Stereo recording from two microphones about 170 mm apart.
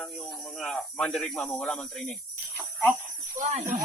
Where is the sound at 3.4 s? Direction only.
45° right (ahead or behind).